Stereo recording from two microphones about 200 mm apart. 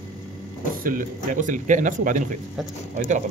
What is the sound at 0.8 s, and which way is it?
Speech, 40° right (ahead or behind).